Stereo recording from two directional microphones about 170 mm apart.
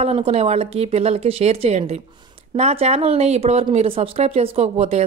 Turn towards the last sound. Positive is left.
turn(degrees=-40)  # may be behind; listen again after turning